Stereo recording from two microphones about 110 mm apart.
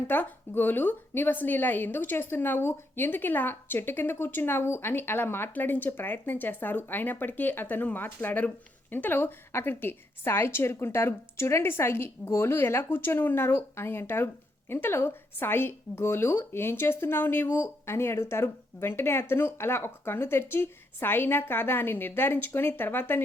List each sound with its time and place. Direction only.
0.1 s a woman's voice: 20° left (ahead or behind)